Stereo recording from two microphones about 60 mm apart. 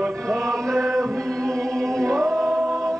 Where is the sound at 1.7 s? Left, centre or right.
Centre.